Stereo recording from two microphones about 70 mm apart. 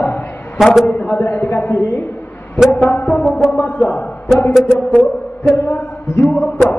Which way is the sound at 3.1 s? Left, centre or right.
Centre.